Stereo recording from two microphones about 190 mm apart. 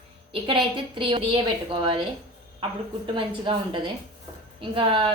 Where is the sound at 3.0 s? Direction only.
25° right (ahead or behind).